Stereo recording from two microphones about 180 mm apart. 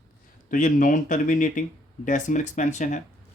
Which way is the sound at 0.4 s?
45° left (ahead or behind).